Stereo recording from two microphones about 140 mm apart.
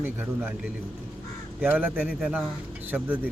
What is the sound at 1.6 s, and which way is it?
Speech, 10° right (ahead or behind).